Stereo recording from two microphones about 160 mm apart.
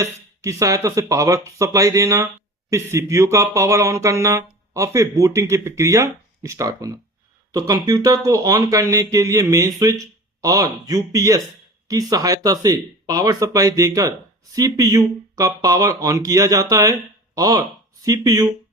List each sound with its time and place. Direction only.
0.0 s speech: 20° right (ahead or behind)